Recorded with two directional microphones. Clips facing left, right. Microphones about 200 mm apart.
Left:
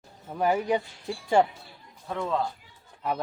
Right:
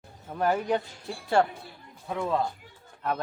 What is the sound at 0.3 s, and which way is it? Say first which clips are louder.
Speech: left 1 dB; 5° left (ahead or behind).